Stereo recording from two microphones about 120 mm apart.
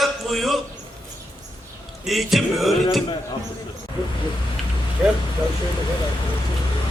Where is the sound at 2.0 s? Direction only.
Centre (ahead or behind).